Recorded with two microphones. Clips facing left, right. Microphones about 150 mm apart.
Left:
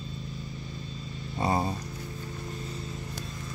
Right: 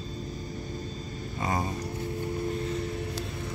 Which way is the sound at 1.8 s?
60° right (ahead or behind).